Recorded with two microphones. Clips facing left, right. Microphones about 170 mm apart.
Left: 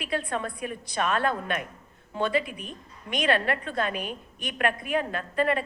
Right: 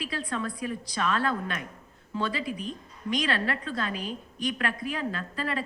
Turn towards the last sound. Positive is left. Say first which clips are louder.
# left 6 dB
turn(degrees=55)  # may be behind; listen again after turning